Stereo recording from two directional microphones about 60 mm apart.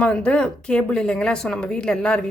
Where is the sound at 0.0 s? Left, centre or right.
Centre.